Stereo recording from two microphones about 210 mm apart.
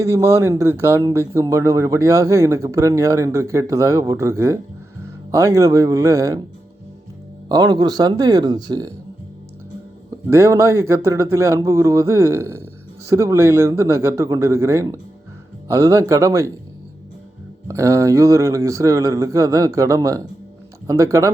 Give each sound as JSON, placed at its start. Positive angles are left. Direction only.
{"t": 0.0, "sound": "speech", "side_deg": -15}
{"t": 7.4, "sound": "speech", "side_deg": -20}
{"t": 10.2, "sound": "speech", "side_deg": -15}
{"t": 17.7, "sound": "speech", "side_deg": -15}